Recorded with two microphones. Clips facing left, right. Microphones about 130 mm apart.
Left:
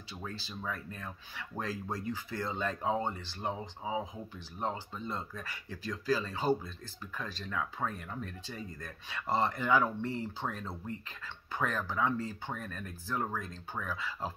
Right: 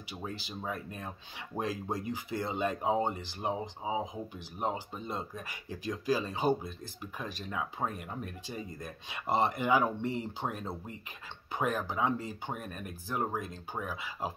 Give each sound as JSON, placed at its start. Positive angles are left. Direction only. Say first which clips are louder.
{"t": 0.2, "sound": "speech", "louder": "right 2 dB", "side_deg": -15}